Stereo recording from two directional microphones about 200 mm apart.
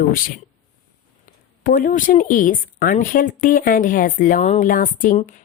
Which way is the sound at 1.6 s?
40° left (ahead or behind).